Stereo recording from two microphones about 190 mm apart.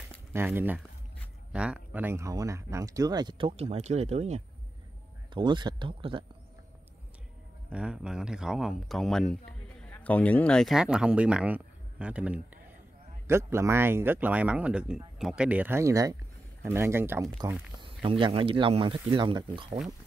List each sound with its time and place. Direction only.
0.3 s speech: 10° right (ahead or behind); by 4.4 s 35° right (ahead or behind)
5.3 s speech: 25° right (ahead or behind)
7.7 s a man's voice: 5° right (ahead or behind)
17.7 s speech: 25° right (ahead or behind)